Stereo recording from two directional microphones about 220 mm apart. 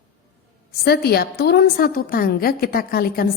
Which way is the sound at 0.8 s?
45° left (ahead or behind).